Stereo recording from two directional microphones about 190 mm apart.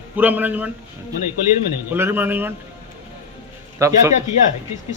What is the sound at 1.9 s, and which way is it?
Speech, 10° right (ahead or behind).